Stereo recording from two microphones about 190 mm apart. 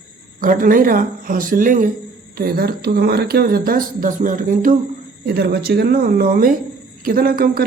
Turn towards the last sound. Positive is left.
turn(degrees=-50)  # may be behind; listen again after turning